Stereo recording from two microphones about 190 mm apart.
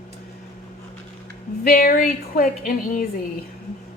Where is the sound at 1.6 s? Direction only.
50° left (ahead or behind).